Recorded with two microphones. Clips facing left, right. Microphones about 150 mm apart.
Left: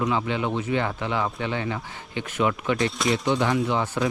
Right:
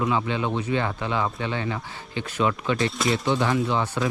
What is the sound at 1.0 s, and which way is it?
Speech, 20° left (ahead or behind).